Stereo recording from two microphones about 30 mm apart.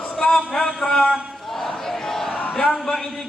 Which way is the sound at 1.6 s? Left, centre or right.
Centre.